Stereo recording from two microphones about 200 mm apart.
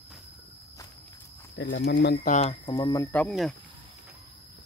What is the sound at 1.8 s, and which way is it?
Speech, 55° left (ahead or behind).